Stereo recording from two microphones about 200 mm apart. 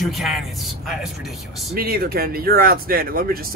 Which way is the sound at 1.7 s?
50° right (ahead or behind).